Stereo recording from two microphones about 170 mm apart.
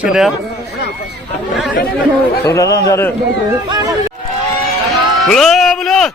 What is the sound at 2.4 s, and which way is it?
Speech, 20° left (ahead or behind).